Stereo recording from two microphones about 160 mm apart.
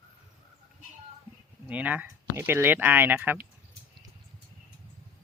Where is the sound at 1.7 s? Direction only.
10° right (ahead or behind).